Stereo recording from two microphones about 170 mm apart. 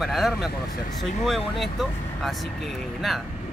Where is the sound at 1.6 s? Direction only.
Centre (ahead or behind).